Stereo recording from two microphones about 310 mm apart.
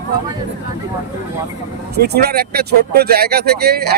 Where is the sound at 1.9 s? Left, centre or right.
Right.